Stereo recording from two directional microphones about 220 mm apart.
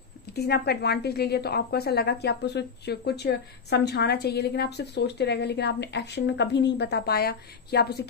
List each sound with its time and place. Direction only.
0.3 s a woman's voice: 45° left (ahead or behind)